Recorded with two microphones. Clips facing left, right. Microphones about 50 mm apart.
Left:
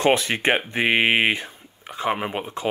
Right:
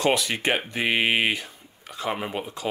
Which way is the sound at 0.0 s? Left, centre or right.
Left.